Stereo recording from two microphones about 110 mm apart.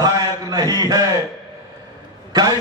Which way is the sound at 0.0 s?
35° right (ahead or behind).